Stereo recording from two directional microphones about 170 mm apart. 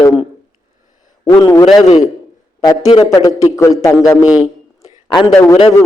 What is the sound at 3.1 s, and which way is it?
A man's voice, 20° left (ahead or behind).